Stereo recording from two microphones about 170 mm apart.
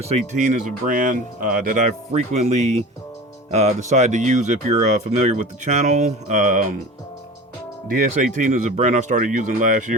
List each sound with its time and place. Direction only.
0.0 s speech: 40° right (ahead or behind)
7.9 s speech: 55° right (ahead or behind)